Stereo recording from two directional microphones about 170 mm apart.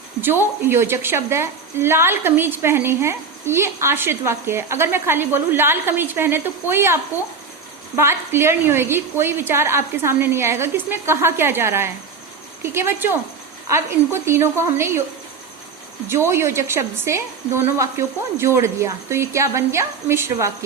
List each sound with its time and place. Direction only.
0.2 s a woman's voice: 15° right (ahead or behind)
16.0 s a woman's voice: 15° right (ahead or behind)